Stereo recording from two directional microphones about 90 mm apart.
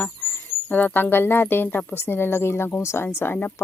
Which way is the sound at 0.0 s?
20° left (ahead or behind).